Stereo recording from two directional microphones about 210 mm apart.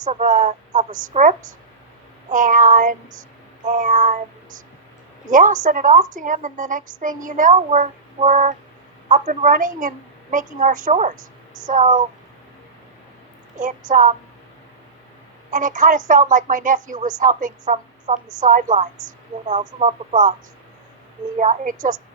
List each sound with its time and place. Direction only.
0.0 s a woman's voice: 35° right (ahead or behind)
5.3 s a woman's voice: 40° right (ahead or behind)
13.6 s a woman's voice: 40° right (ahead or behind)
15.4 s a woman's voice: 40° right (ahead or behind)
21.3 s a woman's voice: 35° right (ahead or behind)